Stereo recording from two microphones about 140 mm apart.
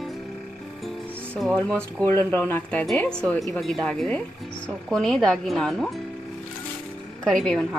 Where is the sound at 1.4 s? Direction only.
5° left (ahead or behind).